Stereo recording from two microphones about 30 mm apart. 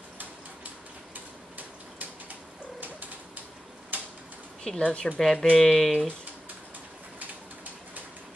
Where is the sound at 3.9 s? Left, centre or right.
Right.